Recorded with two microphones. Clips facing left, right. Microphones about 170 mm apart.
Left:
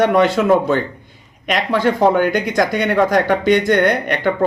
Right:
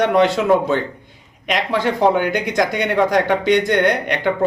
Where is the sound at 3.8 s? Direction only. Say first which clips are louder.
Left 1 dB; 20° right (ahead or behind).